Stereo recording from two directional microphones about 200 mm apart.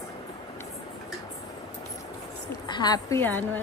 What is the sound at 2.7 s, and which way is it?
Speech, 20° left (ahead or behind).